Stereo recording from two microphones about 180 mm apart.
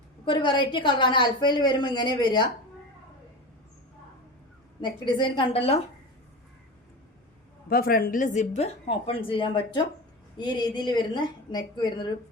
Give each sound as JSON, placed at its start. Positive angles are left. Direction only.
{"t": 0.3, "sound": "a woman's voice", "side_deg": 25}
{"t": 4.8, "sound": "a woman's voice", "side_deg": 25}
{"t": 7.7, "sound": "a woman's voice", "side_deg": 55}